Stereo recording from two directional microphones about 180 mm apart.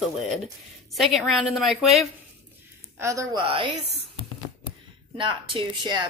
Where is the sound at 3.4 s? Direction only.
30° right (ahead or behind).